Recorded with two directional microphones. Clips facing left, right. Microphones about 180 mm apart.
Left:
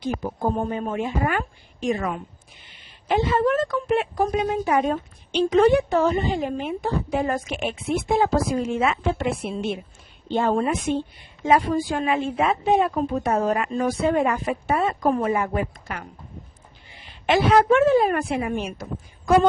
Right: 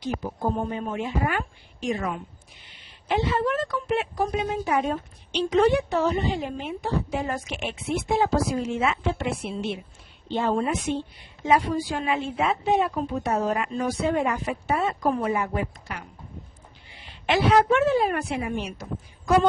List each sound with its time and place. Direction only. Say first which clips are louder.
0.0 s a woman's voice: left 3 dB; 50° left (ahead or behind)